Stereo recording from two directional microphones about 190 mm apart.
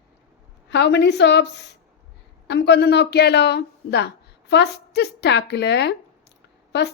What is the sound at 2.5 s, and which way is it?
A woman's voice, 65° left (ahead or behind).